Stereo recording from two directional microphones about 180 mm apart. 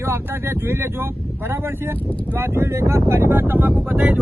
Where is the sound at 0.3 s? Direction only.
10° right (ahead or behind).